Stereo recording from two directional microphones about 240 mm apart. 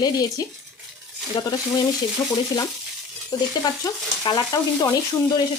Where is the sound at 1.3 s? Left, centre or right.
Centre.